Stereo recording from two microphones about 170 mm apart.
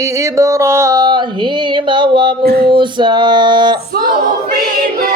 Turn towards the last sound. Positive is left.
turn(degrees=-25)  # may be behind; listen again after turning